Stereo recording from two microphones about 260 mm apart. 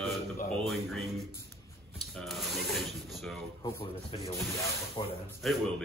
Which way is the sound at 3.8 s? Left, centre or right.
Left.